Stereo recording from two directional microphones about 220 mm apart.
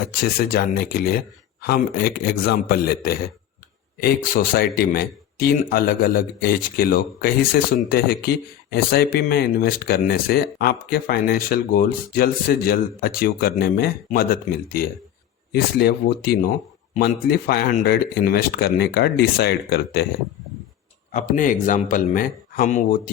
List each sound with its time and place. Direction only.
0.2 s speech: 45° left (ahead or behind)
15.8 s speech: 45° left (ahead or behind)
21.1 s speech: 35° left (ahead or behind)